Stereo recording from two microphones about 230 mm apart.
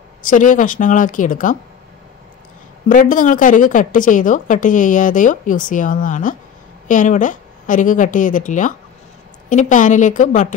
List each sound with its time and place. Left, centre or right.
0.2 s a woman's voice: left
2.9 s a woman's voice: left